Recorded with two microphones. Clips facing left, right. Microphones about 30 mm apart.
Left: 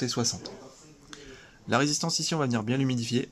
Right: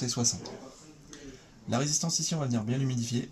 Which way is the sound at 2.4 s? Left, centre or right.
Left.